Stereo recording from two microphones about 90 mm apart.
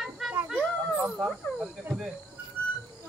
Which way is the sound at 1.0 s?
15° right (ahead or behind).